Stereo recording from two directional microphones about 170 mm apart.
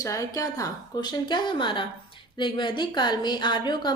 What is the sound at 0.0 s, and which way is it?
A woman's voice, 20° left (ahead or behind).